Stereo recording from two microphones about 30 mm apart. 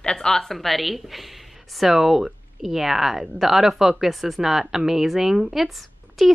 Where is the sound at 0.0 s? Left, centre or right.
Left.